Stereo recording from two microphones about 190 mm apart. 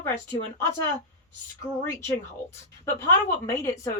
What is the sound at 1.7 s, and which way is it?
Speech, 10° right (ahead or behind).